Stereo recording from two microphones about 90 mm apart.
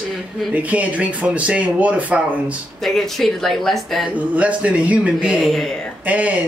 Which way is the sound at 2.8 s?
5° left (ahead or behind).